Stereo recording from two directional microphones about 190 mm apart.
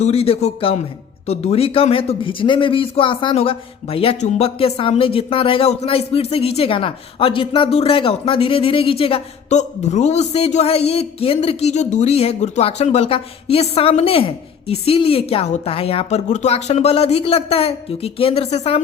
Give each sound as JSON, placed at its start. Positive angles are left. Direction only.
{"t": 0.0, "sound": "speech", "side_deg": 30}